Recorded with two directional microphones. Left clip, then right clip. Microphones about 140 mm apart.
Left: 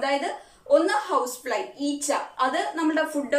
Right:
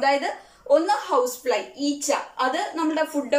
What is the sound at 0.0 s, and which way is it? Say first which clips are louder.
A woman's voice: right 4 dB; 10° right (ahead or behind).